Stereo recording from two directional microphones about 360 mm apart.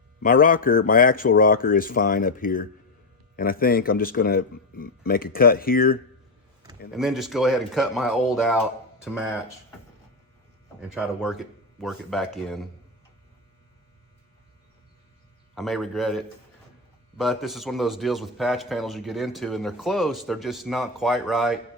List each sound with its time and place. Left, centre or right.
0.2 s speech: left
6.7 s a man's voice: centre
10.8 s a man's voice: centre
15.5 s a man's voice: centre